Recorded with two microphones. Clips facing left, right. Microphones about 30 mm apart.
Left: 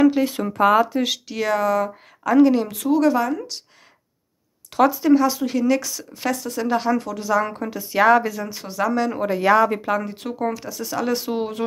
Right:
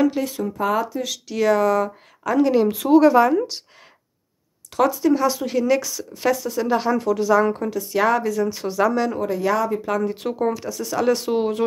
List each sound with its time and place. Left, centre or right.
0.2 s speech: centre
0.6 s speech: left
1.2 s a woman's voice: centre
4.7 s a woman's voice: centre
7.7 s speech: centre
8.5 s a woman's voice: centre
9.1 s speech: left
10.0 s a woman's voice: centre